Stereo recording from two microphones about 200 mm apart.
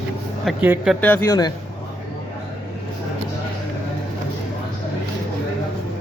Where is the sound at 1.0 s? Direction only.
10° left (ahead or behind).